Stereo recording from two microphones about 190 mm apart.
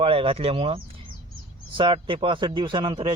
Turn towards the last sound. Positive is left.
turn(degrees=-25)  # may be behind; listen again after turning